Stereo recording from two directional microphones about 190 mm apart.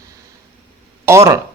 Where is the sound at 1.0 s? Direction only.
15° right (ahead or behind).